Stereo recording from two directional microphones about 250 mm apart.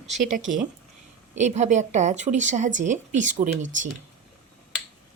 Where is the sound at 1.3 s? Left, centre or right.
Right.